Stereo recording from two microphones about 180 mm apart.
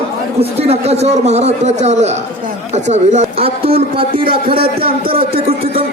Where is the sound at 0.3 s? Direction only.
35° right (ahead or behind).